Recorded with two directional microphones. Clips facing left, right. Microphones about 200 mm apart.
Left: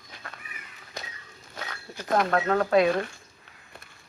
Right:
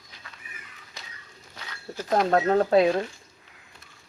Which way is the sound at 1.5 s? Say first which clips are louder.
Right 2 dB; 55° left (ahead or behind).